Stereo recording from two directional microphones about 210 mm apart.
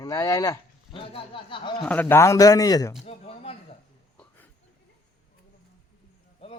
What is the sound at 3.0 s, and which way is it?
Speech, 30° left (ahead or behind).